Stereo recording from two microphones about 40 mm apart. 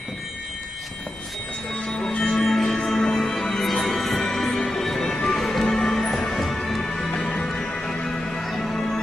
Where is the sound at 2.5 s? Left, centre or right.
Centre.